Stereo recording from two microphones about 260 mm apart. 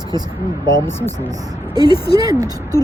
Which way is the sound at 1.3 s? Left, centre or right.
Centre.